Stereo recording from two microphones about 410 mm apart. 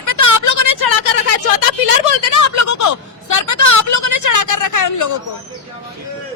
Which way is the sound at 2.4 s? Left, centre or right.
Left.